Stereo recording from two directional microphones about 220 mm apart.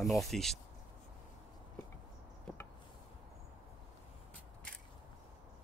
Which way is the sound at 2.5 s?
5° left (ahead or behind).